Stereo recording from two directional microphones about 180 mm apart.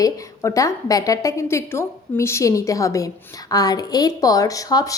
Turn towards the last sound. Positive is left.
turn(degrees=20)  # may be behind; listen again after turning